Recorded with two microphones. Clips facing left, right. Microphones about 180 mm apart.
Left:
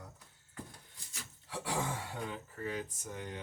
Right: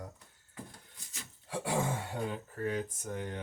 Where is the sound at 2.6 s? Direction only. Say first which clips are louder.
Right 5 dB; 50° right (ahead or behind).